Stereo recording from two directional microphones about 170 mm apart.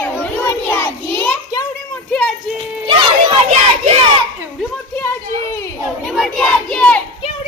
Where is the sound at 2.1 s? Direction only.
5° left (ahead or behind).